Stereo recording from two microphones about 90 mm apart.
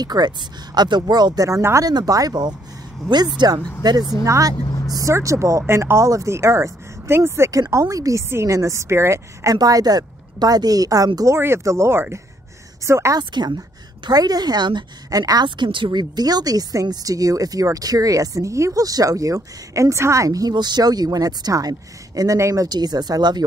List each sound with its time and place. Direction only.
0.0 s a woman's voice: 50° right (ahead or behind)
11.1 s a woman's voice: 30° right (ahead or behind)
13.2 s speech: 55° right (ahead or behind)
15.4 s speech: 60° right (ahead or behind)